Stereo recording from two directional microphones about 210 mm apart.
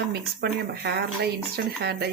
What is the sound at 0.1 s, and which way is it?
Speech, 50° right (ahead or behind).